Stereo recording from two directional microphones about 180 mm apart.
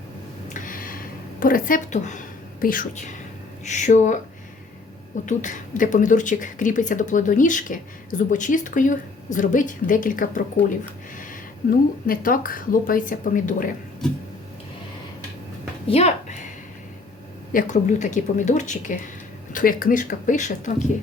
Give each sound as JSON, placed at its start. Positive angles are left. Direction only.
{"t": 0.5, "sound": "a sound", "side_deg": 50}
{"t": 3.6, "sound": "speech", "side_deg": 40}
{"t": 5.2, "sound": "speech", "side_deg": 45}
{"t": 12.0, "sound": "speech", "side_deg": 50}
{"t": 14.0, "sound": "a sound", "side_deg": 5}
{"t": 15.9, "sound": "a woman's voice", "side_deg": 35}
{"t": 17.5, "sound": "speech", "side_deg": 45}